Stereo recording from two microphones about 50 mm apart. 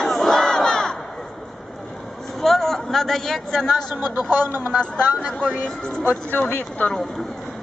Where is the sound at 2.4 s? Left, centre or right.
Centre.